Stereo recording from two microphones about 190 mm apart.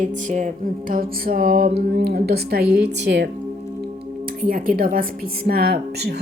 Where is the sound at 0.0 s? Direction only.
40° right (ahead or behind); by 3.2 s 65° right (ahead or behind).